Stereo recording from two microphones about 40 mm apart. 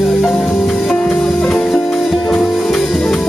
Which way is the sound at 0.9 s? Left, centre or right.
Left.